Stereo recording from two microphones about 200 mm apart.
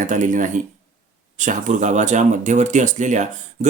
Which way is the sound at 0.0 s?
40° right (ahead or behind).